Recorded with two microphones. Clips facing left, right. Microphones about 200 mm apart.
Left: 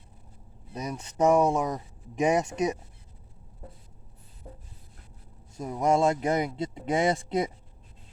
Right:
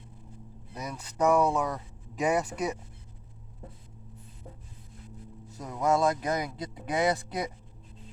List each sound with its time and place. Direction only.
0.7 s speech: 25° left (ahead or behind)
1.4 s speech: 15° left (ahead or behind)
5.5 s speech: 25° left (ahead or behind)